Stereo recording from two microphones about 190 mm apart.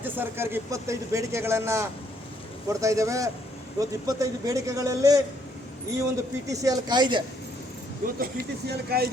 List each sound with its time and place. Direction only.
0.0 s speech: 10° right (ahead or behind)
6.5 s speech: 20° right (ahead or behind)
8.0 s speech: 55° right (ahead or behind)